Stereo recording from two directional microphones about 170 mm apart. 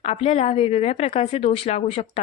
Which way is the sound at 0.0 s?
40° left (ahead or behind).